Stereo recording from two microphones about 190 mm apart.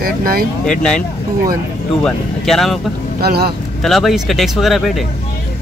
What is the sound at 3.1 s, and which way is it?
Speech, 55° right (ahead or behind).